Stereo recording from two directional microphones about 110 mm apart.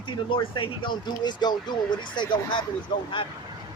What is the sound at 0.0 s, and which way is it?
Speech, 45° left (ahead or behind).